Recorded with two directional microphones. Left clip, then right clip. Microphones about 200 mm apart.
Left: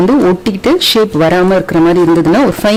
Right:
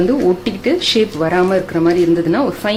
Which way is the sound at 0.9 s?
50° left (ahead or behind).